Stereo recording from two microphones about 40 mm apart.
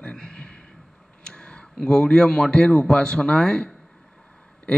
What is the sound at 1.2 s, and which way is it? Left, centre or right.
A man's voice, left.